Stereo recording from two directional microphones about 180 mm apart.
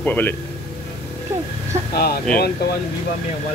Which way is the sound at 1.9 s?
60° left (ahead or behind).